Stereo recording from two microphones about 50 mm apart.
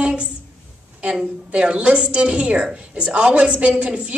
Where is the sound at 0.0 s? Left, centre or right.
Right.